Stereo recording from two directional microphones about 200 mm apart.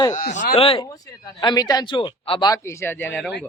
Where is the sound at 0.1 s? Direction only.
40° left (ahead or behind).